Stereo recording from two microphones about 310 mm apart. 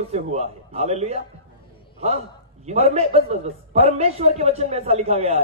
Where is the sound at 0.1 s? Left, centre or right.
Right.